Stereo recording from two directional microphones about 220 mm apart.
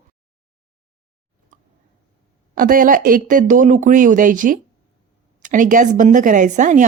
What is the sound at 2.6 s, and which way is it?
A woman's voice, 40° right (ahead or behind).